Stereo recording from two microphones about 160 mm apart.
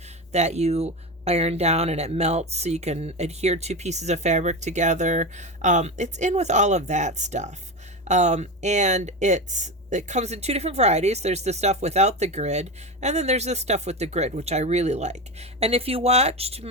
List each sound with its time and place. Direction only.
0.3 s speech: 45° right (ahead or behind)